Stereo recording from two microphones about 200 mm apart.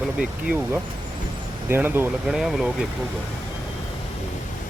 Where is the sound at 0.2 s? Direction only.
5° right (ahead or behind).